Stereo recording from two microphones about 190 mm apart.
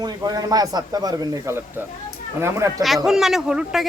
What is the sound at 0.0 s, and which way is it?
Speech, 20° right (ahead or behind).